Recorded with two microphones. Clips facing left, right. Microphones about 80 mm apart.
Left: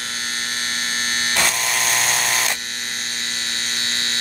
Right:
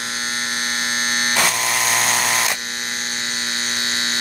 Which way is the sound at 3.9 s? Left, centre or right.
Centre.